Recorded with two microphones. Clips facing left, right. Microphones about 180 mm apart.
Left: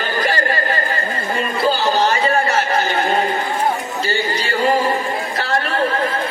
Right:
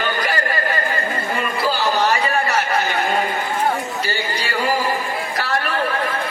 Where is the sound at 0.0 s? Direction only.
30° left (ahead or behind).